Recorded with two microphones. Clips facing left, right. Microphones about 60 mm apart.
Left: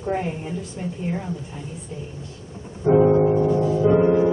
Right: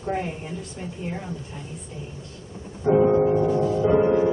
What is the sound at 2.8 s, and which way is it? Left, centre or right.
Music, centre.